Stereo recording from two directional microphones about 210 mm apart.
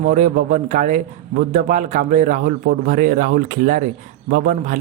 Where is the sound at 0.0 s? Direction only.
35° right (ahead or behind).